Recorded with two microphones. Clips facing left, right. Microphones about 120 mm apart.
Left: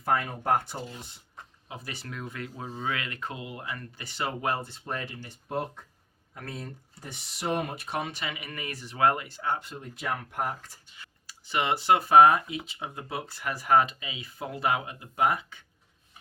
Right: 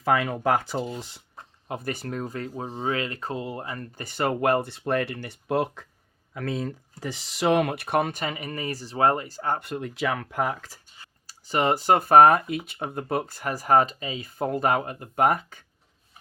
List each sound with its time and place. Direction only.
0.0 s speech: 90° right
1.6 s speech: 55° right (ahead or behind)
9.6 s speech: 65° right (ahead or behind); by 10.8 s 90° right
11.0 s speech: 40° right (ahead or behind)